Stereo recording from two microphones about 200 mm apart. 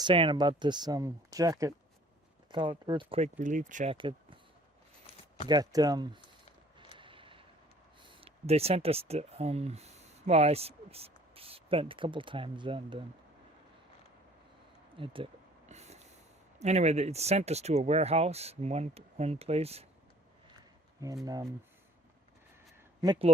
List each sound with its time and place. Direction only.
0.0 s speech: 25° right (ahead or behind)
3.9 s speech: 25° right (ahead or behind)
5.5 s speech: 20° right (ahead or behind)
6.9 s vehicle: 25° right (ahead or behind)
8.1 s speech: 30° right (ahead or behind)
14.9 s a sound: 25° right (ahead or behind)
16.6 s speech: 35° right (ahead or behind)
21.2 s speech: 15° right (ahead or behind)
23.0 s speech: 20° right (ahead or behind)